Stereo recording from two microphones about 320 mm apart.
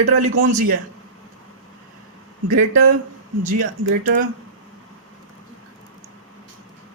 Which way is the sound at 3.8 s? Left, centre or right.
Right.